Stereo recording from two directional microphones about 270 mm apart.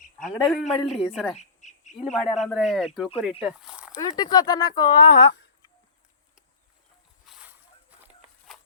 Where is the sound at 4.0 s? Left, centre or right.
Centre.